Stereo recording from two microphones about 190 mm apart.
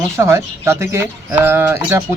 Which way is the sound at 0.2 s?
15° right (ahead or behind).